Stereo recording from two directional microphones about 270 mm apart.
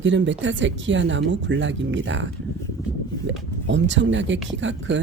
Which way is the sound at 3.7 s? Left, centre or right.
Right.